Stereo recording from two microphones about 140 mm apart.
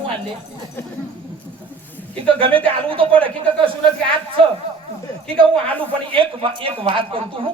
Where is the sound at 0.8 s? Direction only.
15° left (ahead or behind).